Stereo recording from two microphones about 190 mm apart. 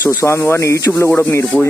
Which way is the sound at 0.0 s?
15° left (ahead or behind).